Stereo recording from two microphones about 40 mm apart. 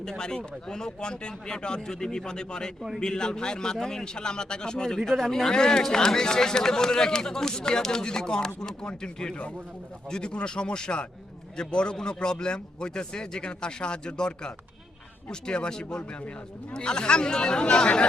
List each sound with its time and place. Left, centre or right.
0.2 s speech: centre